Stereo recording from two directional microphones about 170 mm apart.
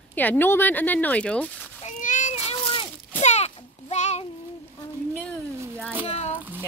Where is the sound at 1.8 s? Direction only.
45° left (ahead or behind).